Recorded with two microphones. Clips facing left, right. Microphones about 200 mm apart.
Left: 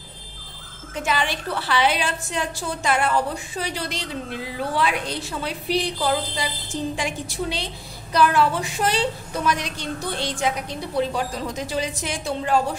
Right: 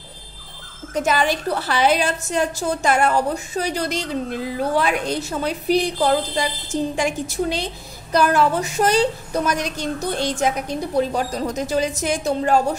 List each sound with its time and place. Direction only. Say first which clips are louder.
0.9 s a woman's voice: right 5 dB; 40° right (ahead or behind)